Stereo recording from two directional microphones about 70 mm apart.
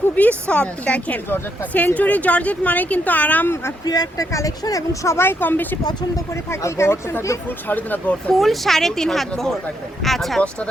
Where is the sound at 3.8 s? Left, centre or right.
Left.